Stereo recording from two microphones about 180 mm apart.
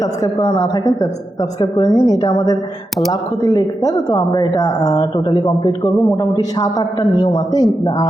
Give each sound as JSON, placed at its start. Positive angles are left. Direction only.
{"t": 0.0, "sound": "speech", "side_deg": 20}
{"t": 1.7, "sound": "speech", "side_deg": 25}